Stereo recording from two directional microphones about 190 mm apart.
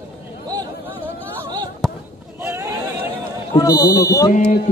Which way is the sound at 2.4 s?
15° right (ahead or behind).